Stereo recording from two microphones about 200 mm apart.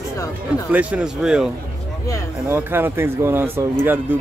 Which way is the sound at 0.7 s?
5° right (ahead or behind).